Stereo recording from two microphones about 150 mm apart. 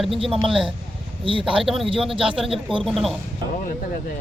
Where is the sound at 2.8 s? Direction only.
Centre (ahead or behind).